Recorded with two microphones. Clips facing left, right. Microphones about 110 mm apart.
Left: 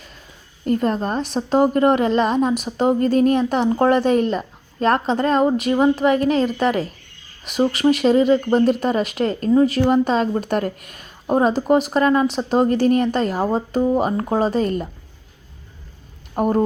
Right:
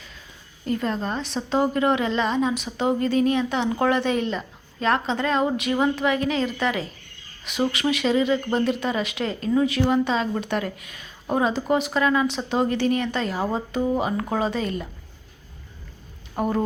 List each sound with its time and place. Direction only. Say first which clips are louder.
0.6 s a woman's voice: left 6 dB; 45° left (ahead or behind)
16.4 s a woman's voice: left 5 dB; 45° left (ahead or behind)